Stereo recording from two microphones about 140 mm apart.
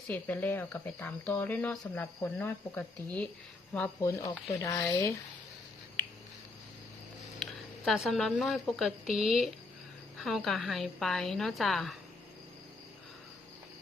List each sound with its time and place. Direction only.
0.1 s speech: 15° left (ahead or behind)
3.8 s speech: 25° left (ahead or behind)
7.9 s a woman's voice: centre (ahead or behind)